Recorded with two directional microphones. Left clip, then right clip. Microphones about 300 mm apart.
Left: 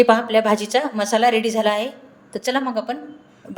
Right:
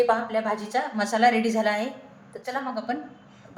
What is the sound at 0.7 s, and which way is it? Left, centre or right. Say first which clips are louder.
A woman's voice: left 6 dB; left.